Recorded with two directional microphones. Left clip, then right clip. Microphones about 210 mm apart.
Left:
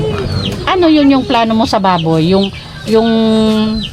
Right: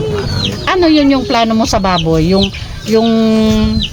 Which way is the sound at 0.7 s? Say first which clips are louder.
Left 1 dB; 15° left (ahead or behind).